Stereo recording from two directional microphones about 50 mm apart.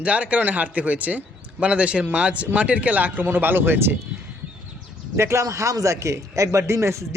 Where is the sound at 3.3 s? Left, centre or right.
Right.